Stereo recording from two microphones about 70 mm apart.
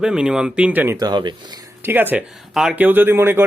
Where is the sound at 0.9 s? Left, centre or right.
Right.